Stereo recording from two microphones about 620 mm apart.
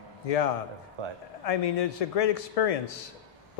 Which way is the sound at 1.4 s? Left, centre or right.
Left.